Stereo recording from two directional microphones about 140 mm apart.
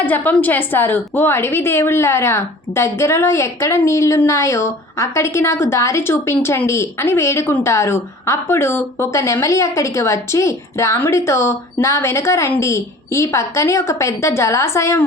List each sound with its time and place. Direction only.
0.0 s a woman's voice: 15° left (ahead or behind)